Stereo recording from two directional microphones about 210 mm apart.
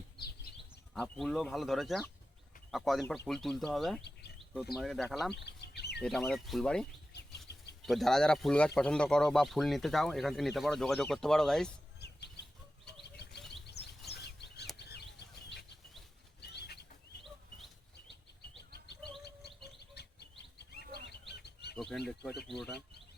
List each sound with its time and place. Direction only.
0.9 s speech: 5° left (ahead or behind)
5.3 s bird: 50° left (ahead or behind)
6.0 s speech: 5° left (ahead or behind)
7.1 s bird: 55° left (ahead or behind)
7.9 s speech: centre (ahead or behind)
11.9 s chirp: 50° left (ahead or behind)
13.0 s bird flight: 55° left (ahead or behind)
13.7 s bird: 50° left (ahead or behind)
14.8 s a sound: 50° left (ahead or behind)
16.4 s bird: 50° left (ahead or behind)
19.2 s bird: 50° left (ahead or behind)
21.8 s bird: centre (ahead or behind)
22.4 s speech: centre (ahead or behind)